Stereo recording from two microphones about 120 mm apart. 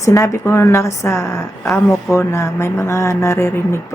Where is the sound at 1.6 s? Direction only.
Centre (ahead or behind).